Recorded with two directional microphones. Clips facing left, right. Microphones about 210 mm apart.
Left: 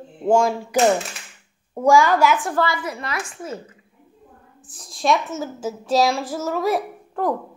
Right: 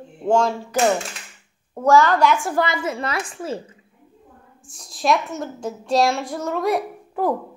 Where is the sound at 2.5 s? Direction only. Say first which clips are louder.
Right 1 dB; 20° right (ahead or behind).